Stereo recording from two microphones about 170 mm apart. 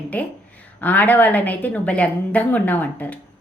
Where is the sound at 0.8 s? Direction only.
10° left (ahead or behind).